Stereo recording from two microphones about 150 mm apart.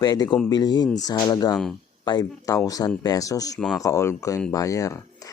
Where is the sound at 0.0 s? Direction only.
25° left (ahead or behind).